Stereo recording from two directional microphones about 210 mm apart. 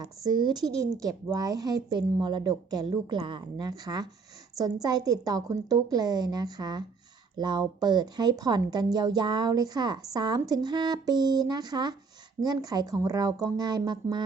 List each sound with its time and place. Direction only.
0.0 s a woman's voice: 20° right (ahead or behind)